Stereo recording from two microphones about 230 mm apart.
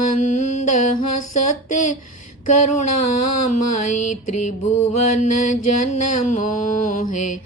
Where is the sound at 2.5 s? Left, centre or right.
Left.